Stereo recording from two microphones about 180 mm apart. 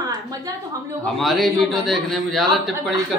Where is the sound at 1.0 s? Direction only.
Centre (ahead or behind).